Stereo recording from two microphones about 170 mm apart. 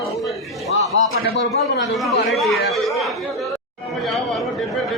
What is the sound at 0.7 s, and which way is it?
Speech, 90° left.